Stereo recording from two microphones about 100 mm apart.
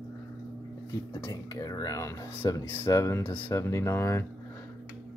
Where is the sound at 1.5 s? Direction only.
35° left (ahead or behind).